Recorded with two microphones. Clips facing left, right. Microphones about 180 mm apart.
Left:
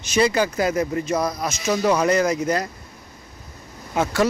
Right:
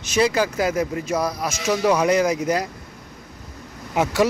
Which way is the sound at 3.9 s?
15° right (ahead or behind).